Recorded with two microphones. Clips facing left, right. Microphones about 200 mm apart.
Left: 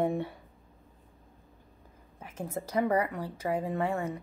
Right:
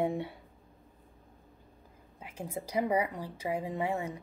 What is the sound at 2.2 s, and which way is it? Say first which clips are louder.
A woman's voice: left 2 dB; 10° right (ahead or behind).